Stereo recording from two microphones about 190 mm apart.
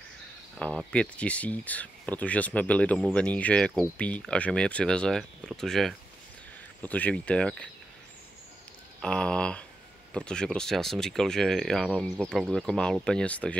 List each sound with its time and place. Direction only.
0.6 s speech: 5° left (ahead or behind)
9.0 s speech: 5° left (ahead or behind)